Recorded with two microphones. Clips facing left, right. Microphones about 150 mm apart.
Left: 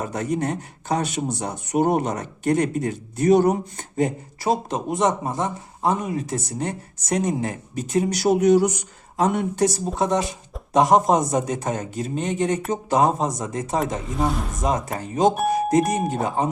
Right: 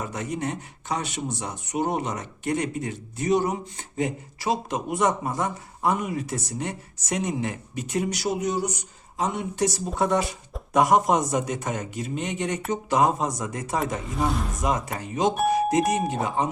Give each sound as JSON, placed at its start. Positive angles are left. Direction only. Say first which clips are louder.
{"t": 0.0, "sound": "speech", "louder": "left 5 dB", "side_deg": 40}
{"t": 4.9, "sound": "speech", "louder": "left 2 dB", "side_deg": 25}
{"t": 8.1, "sound": "speech", "louder": "left 9 dB", "side_deg": 60}
{"t": 9.9, "sound": "speech", "louder": "left 1 dB", "side_deg": 20}
{"t": 14.1, "sound": "speech", "louder": "left 1 dB", "side_deg": 0}
{"t": 14.6, "sound": "speech", "louder": "left 4 dB", "side_deg": 35}